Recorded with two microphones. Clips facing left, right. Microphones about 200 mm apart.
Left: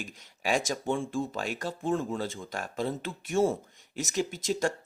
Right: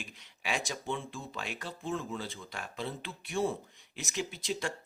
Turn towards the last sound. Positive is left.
turn(degrees=45)  # may be behind; listen again after turning